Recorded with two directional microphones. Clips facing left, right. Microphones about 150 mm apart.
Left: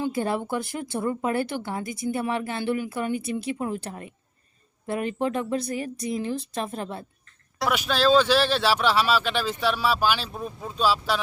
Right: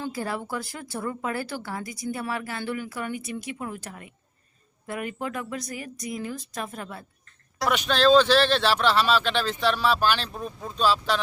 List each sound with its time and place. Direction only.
0.0 s speech: 25° left (ahead or behind)
7.6 s speech: 5° left (ahead or behind)